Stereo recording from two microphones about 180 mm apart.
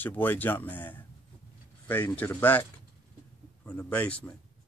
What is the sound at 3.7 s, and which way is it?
Speech, 10° left (ahead or behind).